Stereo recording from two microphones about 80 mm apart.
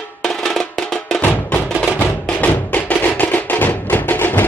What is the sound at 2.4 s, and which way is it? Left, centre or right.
Music, centre.